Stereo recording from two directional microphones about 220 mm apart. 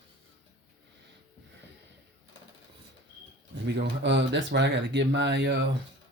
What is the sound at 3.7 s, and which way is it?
Speech, 50° right (ahead or behind).